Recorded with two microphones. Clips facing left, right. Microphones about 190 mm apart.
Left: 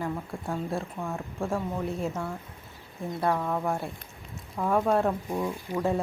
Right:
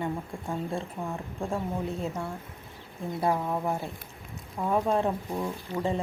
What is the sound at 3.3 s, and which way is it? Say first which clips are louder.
Speech: even; 15° right (ahead or behind).